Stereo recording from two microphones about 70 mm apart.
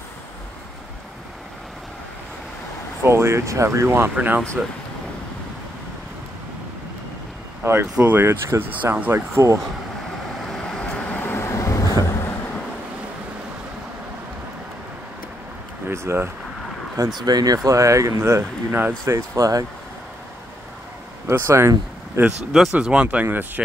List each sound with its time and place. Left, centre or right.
3.0 s speech: right
4.1 s speech: right
7.6 s speech: right
10.5 s vehicle: centre; by 12.3 s left
15.9 s a sound: right
17.2 s speech: right
17.6 s speech: right
18.7 s speech: right
19.0 s speech: right
21.3 s speech: right
22.7 s speech: centre
23.2 s speech: right